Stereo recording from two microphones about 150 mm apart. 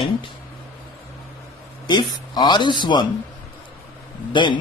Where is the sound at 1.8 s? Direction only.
30° left (ahead or behind).